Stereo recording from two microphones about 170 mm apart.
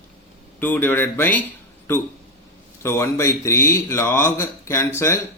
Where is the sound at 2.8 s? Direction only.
15° left (ahead or behind).